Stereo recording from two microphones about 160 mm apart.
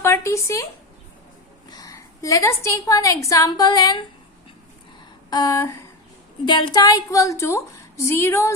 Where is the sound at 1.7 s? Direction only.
20° left (ahead or behind).